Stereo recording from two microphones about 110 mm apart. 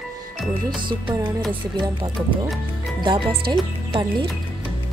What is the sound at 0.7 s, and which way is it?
Speech, 45° right (ahead or behind).